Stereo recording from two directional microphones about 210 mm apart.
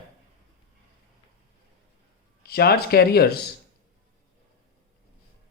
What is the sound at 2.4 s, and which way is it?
Speech, 50° left (ahead or behind).